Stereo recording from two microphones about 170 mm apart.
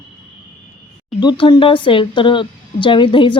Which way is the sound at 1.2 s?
25° left (ahead or behind).